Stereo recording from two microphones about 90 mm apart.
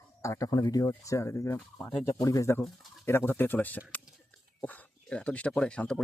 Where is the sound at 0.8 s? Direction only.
35° left (ahead or behind).